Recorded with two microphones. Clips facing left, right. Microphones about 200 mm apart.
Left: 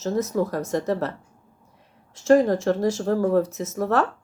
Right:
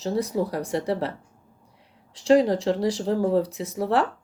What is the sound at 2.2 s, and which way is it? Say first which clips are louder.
Speech: left 1 dB; 15° right (ahead or behind).